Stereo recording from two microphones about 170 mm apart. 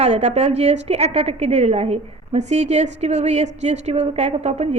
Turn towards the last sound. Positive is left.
turn(degrees=-40)  # may be behind; listen again after turning